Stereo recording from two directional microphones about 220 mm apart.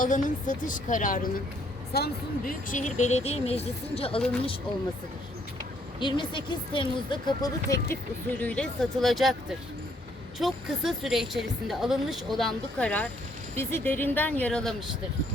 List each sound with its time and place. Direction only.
0.0 s a woman's voice: 35° left (ahead or behind)
2.6 s speech: 35° left (ahead or behind)
6.0 s a woman's voice: 20° left (ahead or behind); by 14.8 s centre (ahead or behind)